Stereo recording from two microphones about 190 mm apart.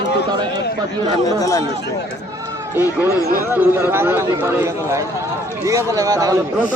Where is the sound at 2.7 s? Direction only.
10° right (ahead or behind).